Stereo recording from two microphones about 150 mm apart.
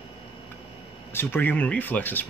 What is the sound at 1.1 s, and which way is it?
Speech, 15° left (ahead or behind).